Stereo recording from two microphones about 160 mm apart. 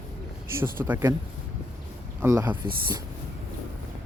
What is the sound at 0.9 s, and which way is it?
Speech, 15° right (ahead or behind).